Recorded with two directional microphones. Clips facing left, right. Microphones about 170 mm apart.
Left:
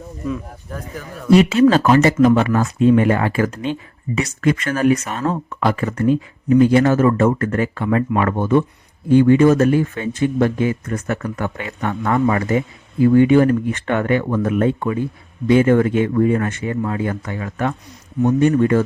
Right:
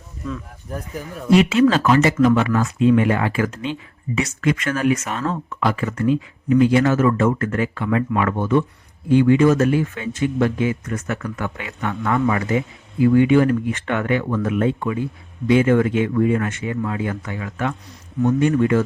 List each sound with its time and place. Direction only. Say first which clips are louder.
1.3 s speech: left 3 dB; 40° left (ahead or behind)